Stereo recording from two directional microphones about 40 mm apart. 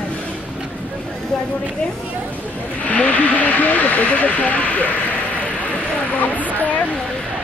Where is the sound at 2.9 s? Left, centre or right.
Left.